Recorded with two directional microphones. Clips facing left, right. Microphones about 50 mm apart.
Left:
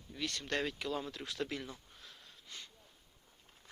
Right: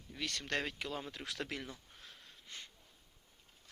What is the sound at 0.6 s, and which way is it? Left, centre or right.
Speech, right.